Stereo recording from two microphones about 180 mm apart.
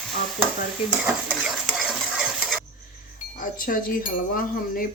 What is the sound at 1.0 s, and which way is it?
Stir, centre (ahead or behind).